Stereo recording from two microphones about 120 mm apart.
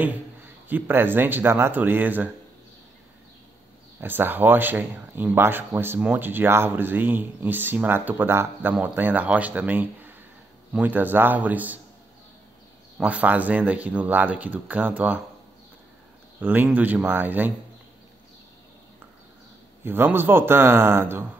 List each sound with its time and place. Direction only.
0.0 s speech: 15° right (ahead or behind)
4.0 s a man's voice: 15° right (ahead or behind)
12.9 s a man's voice: 10° right (ahead or behind)
16.3 s a man's voice: 15° right (ahead or behind)
19.8 s a man's voice: 15° right (ahead or behind)